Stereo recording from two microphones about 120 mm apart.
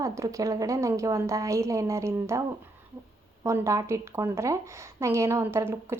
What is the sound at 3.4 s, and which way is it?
A woman's voice, 25° right (ahead or behind).